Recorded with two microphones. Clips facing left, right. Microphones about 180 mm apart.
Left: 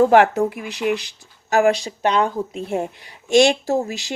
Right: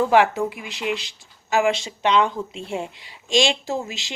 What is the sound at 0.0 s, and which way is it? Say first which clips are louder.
Speech: left 4 dB; 45° left (ahead or behind).